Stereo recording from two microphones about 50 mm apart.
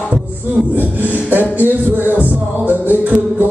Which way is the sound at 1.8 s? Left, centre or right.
Right.